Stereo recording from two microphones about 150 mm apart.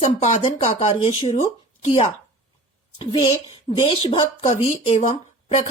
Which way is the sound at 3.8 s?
40° left (ahead or behind).